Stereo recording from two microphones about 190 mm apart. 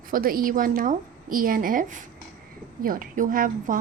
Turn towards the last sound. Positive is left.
turn(degrees=-45)  # may be behind; listen again after turning